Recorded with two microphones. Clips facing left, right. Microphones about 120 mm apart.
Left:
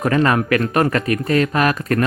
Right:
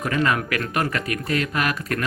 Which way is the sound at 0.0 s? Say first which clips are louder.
Left 6 dB; 40° left (ahead or behind).